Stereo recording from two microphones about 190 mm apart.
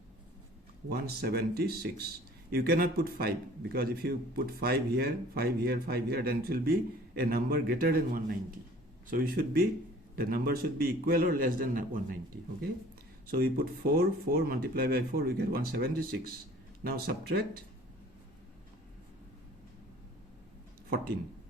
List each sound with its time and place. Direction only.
0.9 s a man's voice: 55° right (ahead or behind)
13.2 s a man's voice: 55° right (ahead or behind)